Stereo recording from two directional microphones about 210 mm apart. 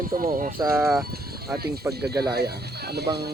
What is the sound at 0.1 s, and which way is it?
Speech, 40° right (ahead or behind).